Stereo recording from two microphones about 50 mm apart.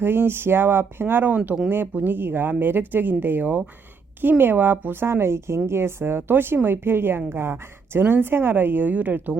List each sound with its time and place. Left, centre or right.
0.0 s a woman's voice: right